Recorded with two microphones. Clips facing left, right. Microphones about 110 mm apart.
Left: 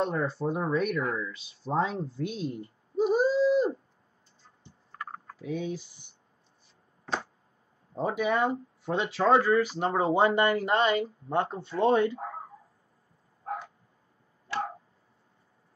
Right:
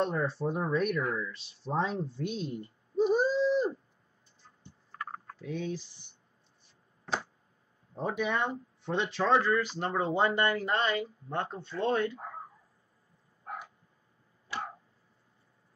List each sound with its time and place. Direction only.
0.0 s speech: centre (ahead or behind)
5.2 s speech: 10° left (ahead or behind)
8.0 s speech: 5° left (ahead or behind)